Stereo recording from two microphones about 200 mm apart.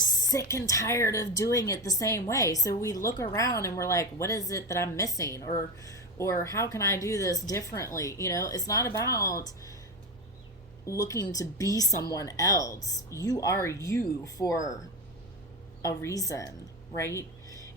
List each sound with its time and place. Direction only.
0.0 s speech: 20° left (ahead or behind)
11.0 s speech: 15° left (ahead or behind)
15.8 s speech: 15° left (ahead or behind)
16.9 s a sound: 15° left (ahead or behind)